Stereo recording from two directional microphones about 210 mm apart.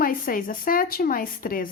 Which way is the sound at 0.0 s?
40° left (ahead or behind).